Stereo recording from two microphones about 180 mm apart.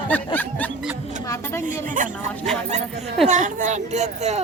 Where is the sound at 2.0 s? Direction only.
45° right (ahead or behind).